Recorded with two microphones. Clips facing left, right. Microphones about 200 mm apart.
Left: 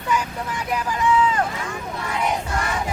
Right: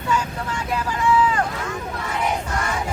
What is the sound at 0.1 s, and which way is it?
Vehicle, 15° left (ahead or behind).